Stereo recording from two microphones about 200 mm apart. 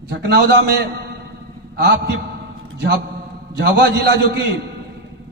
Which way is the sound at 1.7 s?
55° right (ahead or behind).